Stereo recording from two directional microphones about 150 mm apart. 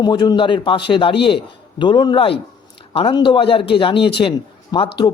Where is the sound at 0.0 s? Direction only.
30° left (ahead or behind).